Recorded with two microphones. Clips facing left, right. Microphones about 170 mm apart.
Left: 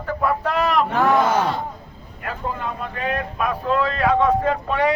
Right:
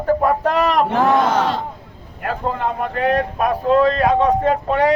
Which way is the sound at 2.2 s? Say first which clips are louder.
Right 6 dB; 65° right (ahead or behind).